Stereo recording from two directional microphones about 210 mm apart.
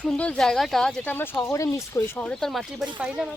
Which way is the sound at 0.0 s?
5° left (ahead or behind).